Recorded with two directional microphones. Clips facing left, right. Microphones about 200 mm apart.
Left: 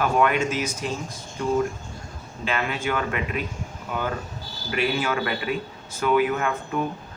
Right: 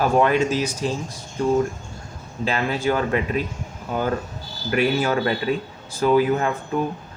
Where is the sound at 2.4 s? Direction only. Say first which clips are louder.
Right 4 dB; 35° right (ahead or behind).